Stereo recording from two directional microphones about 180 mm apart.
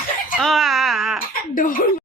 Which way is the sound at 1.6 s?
50° left (ahead or behind).